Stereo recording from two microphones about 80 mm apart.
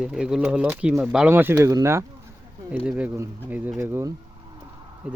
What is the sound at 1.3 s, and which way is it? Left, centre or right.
Speech, right.